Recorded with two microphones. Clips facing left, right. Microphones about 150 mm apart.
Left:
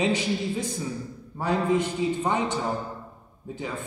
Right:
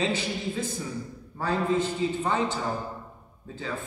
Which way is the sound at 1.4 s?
15° left (ahead or behind).